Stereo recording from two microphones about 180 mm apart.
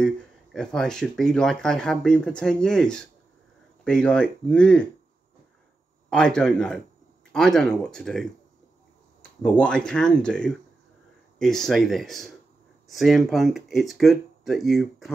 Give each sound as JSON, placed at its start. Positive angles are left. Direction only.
{"t": 0.0, "sound": "speech", "side_deg": 5}
{"t": 6.0, "sound": "speech", "side_deg": 5}
{"t": 9.4, "sound": "speech", "side_deg": 5}